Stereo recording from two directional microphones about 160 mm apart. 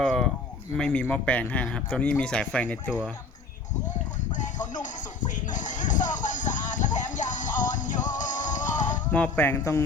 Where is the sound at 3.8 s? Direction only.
50° left (ahead or behind).